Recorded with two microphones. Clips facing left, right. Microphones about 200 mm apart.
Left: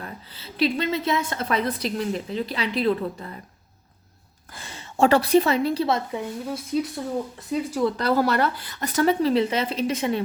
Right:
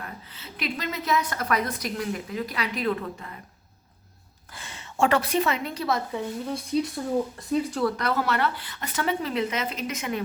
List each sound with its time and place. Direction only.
0.0 s a woman's voice: 30° left (ahead or behind)
4.5 s a woman's voice: 35° left (ahead or behind)
6.5 s speech: 5° left (ahead or behind)
7.9 s speech: 35° left (ahead or behind)